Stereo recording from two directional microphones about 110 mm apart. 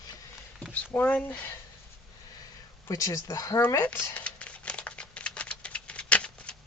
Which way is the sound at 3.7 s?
20° left (ahead or behind).